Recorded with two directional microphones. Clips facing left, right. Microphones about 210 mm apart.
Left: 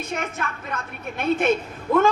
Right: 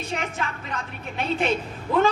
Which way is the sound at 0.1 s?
50° left (ahead or behind).